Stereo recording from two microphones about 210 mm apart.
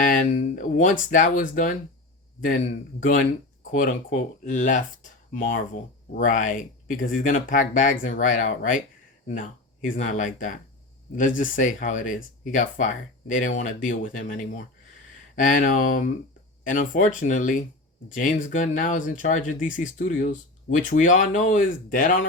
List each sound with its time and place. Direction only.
0.0 s a sound: 40° left (ahead or behind)
0.6 s speech: 40° left (ahead or behind)
3.0 s speech: 40° left (ahead or behind)